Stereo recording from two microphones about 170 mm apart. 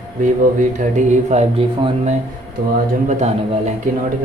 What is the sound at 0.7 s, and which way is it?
Speech, 45° right (ahead or behind).